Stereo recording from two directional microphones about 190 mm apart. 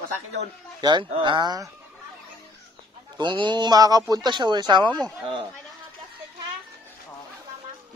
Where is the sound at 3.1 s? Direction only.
25° right (ahead or behind).